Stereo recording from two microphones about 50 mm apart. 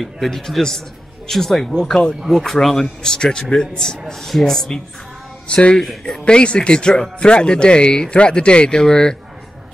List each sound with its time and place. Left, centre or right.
0.0 s a man's voice: centre
5.5 s speech: left
5.8 s a man's voice: centre
6.2 s speech: left